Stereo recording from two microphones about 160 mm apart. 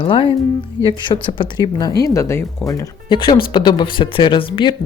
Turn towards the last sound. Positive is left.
turn(degrees=30)  # may be behind; listen again after turning